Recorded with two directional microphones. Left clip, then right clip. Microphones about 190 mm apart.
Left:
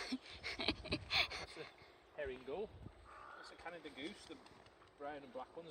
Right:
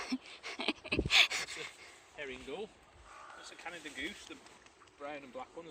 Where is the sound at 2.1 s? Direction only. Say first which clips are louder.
Right 2 dB; 50° left (ahead or behind).